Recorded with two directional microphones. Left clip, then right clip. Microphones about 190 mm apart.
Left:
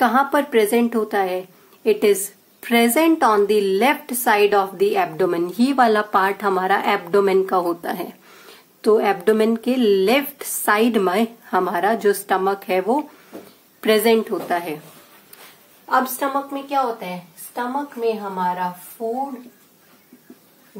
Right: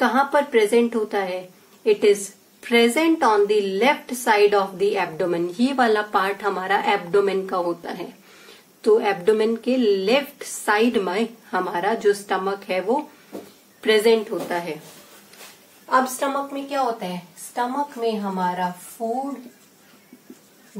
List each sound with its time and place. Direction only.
0.0 s a woman's voice: 45° left (ahead or behind)
15.9 s a woman's voice: 40° left (ahead or behind)